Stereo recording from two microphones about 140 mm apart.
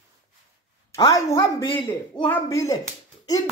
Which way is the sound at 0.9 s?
25° left (ahead or behind).